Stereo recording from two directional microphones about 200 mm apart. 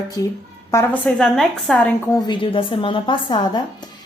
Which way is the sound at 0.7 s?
10° left (ahead or behind).